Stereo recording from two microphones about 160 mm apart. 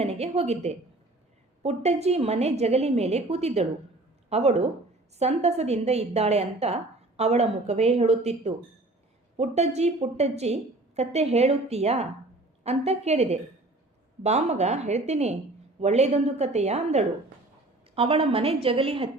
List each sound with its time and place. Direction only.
0.0 s a woman's voice: 40° right (ahead or behind)